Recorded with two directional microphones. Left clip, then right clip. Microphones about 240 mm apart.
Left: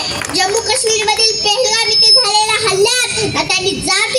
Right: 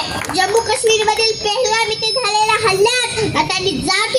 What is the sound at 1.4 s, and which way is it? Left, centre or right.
A child's voice, left.